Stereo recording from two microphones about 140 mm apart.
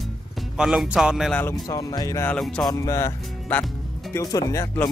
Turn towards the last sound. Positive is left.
turn(degrees=15)  # may be behind; listen again after turning